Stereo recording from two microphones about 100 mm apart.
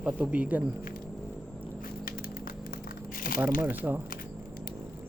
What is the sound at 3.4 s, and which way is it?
Speech, 15° right (ahead or behind).